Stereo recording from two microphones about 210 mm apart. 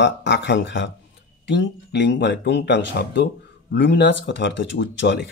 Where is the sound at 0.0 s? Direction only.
55° left (ahead or behind).